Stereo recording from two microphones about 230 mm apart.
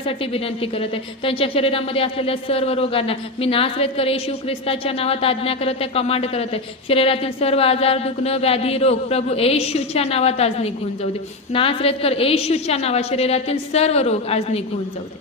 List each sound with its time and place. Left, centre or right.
0.3 s a woman's voice: left